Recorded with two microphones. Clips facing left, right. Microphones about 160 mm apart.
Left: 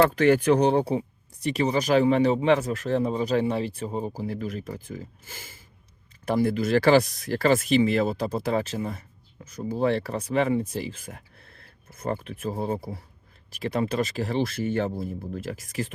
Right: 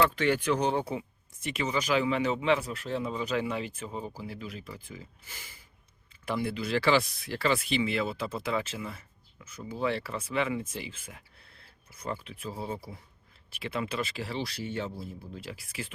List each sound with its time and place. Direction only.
0.0 s speech: 45° left (ahead or behind)